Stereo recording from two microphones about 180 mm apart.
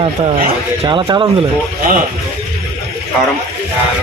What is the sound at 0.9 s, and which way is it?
Speech, 20° right (ahead or behind).